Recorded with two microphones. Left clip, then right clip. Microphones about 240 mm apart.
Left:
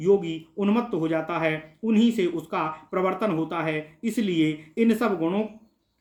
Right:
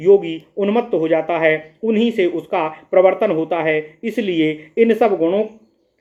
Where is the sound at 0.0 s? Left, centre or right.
Left.